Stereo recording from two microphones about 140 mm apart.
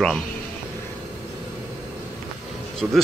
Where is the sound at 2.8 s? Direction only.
10° right (ahead or behind).